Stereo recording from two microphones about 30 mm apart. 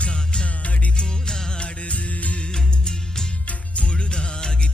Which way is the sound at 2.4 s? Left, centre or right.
Left.